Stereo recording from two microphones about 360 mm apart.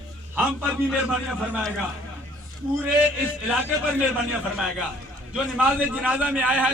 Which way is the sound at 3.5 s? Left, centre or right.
Centre.